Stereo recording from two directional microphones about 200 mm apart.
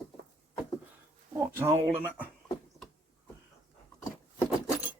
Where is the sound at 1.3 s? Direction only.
15° right (ahead or behind).